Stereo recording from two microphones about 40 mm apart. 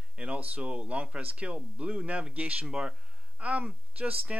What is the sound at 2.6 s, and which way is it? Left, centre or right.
Speech, right.